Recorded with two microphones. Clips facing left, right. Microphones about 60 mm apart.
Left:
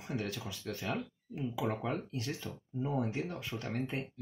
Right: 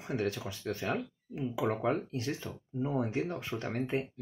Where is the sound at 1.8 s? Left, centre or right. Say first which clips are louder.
Right 5 dB; right.